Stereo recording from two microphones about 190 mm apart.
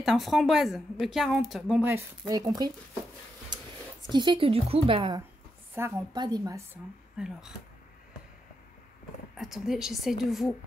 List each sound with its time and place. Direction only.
0.0 s a woman's voice: centre (ahead or behind); by 2.7 s 20° right (ahead or behind)
4.1 s a woman's voice: 25° right (ahead or behind)
7.2 s a woman's voice: 5° right (ahead or behind)
9.4 s a woman's voice: centre (ahead or behind)